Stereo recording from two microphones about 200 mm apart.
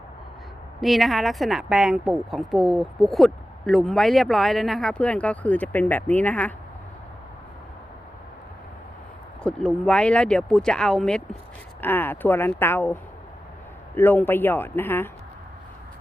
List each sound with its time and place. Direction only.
0.8 s speech: centre (ahead or behind)
9.4 s speech: 5° left (ahead or behind)